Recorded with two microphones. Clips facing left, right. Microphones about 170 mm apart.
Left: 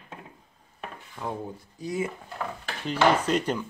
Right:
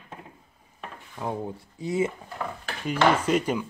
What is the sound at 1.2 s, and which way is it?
Speech, 25° right (ahead or behind).